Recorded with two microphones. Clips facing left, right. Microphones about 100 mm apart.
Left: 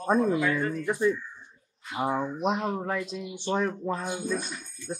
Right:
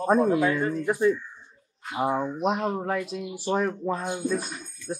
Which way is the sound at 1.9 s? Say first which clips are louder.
Right 2 dB; 10° right (ahead or behind).